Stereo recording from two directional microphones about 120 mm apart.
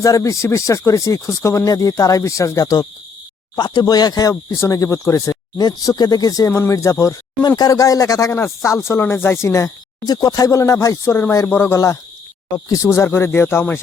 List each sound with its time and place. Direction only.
0.0 s speech: 25° left (ahead or behind)